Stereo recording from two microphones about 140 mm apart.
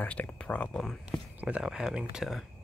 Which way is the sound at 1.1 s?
10° right (ahead or behind).